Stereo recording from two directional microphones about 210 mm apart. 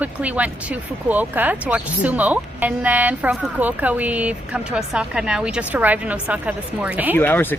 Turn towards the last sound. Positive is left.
turn(degrees=10)  # may be behind; listen again after turning